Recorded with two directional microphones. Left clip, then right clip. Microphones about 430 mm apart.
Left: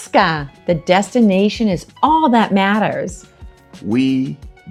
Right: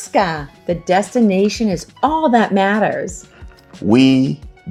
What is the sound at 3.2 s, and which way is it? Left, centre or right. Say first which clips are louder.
Music: right 2 dB; centre.